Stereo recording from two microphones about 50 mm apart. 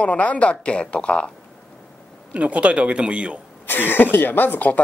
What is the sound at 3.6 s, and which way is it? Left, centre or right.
Speech, left.